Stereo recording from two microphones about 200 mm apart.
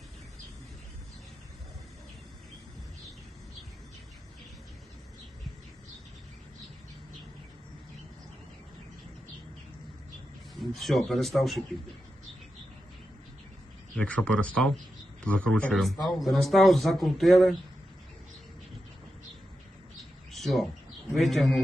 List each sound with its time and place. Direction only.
10.6 s a man's voice: centre (ahead or behind)
13.9 s a man's voice: 5° left (ahead or behind)
20.3 s bird: centre (ahead or behind)
21.2 s a man's voice: centre (ahead or behind)